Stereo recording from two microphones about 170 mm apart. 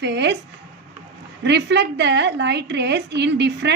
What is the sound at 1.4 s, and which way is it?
A woman's voice, 90° right.